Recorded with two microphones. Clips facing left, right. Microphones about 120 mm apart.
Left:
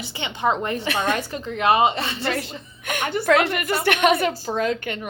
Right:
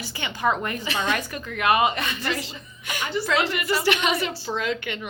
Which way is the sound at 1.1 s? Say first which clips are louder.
Left 3 dB; 30° left (ahead or behind).